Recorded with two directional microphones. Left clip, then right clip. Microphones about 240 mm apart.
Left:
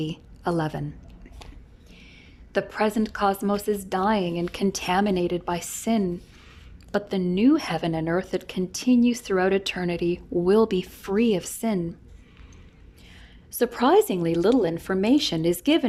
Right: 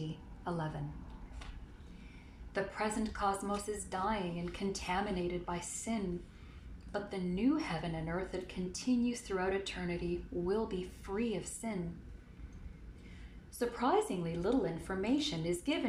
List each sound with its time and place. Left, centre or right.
0.4 s a woman's voice: left
2.5 s a woman's voice: left
13.6 s a woman's voice: left